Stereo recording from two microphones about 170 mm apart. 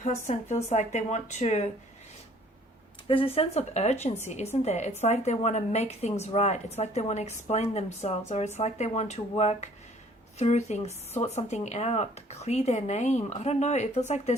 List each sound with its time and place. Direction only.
0.0 s speech: 45° left (ahead or behind)
3.1 s a woman's voice: 35° left (ahead or behind)